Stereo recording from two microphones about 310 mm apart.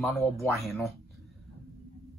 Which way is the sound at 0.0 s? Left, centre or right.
Centre.